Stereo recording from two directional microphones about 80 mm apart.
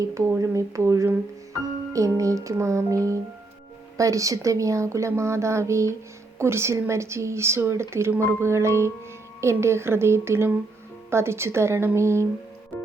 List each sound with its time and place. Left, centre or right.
0.0 s speech: right
12.7 s music: left